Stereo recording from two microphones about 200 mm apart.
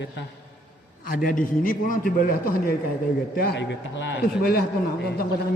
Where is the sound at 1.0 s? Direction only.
45° left (ahead or behind).